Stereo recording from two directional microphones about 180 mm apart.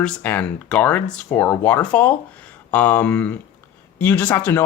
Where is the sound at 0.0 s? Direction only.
10° left (ahead or behind).